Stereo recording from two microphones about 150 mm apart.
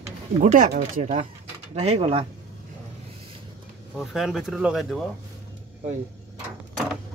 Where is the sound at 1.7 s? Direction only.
45° right (ahead or behind).